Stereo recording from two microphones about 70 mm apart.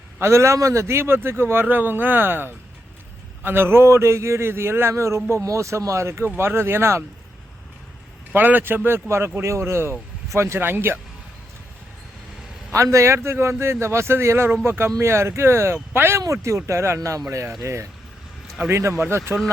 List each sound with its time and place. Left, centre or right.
0.2 s a man's voice: right
8.3 s a man's voice: right
12.7 s a man's voice: right
16.2 s a man's voice: right